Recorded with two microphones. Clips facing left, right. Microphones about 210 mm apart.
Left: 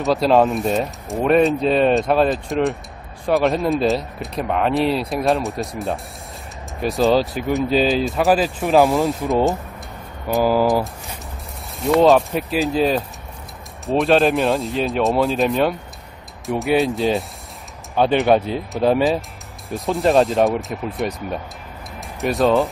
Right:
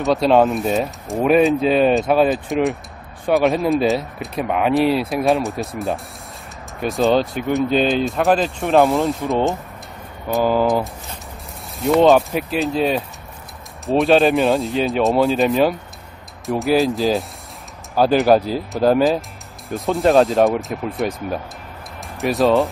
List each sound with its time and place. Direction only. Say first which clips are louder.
0.0 s speech: right 1 dB; centre (ahead or behind)